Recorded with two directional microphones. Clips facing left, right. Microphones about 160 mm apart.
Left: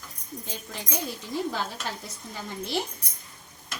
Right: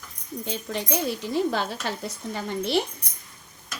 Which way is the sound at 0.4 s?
70° right (ahead or behind).